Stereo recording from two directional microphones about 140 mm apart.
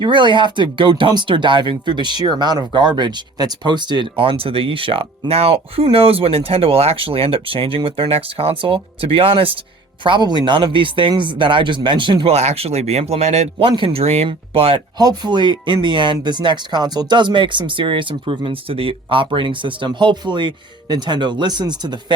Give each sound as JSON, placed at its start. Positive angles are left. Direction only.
{"t": 0.0, "sound": "speech", "side_deg": -35}
{"t": 12.3, "sound": "a man's voice", "side_deg": -50}
{"t": 13.7, "sound": "speech", "side_deg": -40}
{"t": 15.0, "sound": "speech", "side_deg": -30}